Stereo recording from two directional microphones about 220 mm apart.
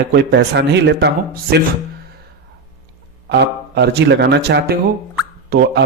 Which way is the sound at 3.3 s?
50° right (ahead or behind).